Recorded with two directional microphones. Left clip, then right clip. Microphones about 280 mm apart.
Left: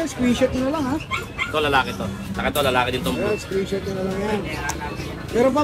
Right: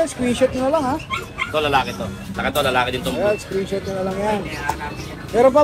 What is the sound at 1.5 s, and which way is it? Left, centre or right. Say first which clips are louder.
Speech: right 1 dB; centre.